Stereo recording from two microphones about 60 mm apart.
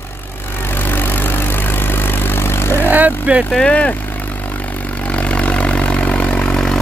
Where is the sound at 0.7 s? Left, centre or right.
Left.